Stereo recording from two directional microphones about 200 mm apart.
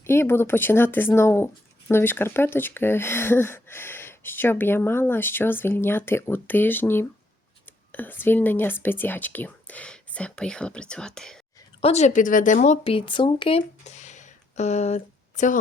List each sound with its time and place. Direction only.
0.0 s speech: 10° left (ahead or behind)
11.8 s speech: 35° left (ahead or behind)